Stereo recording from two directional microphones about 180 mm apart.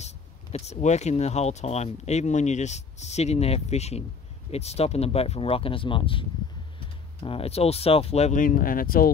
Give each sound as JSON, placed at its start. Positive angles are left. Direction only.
{"t": 0.0, "sound": "speech", "side_deg": 35}